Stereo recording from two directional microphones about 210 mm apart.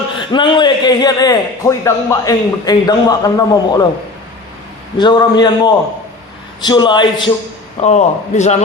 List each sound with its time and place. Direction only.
0.2 s a man's voice: 20° left (ahead or behind)
4.9 s a man's voice: 20° left (ahead or behind)
7.8 s a man's voice: 35° left (ahead or behind)